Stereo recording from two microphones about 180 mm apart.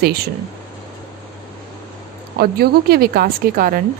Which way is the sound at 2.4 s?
60° right (ahead or behind).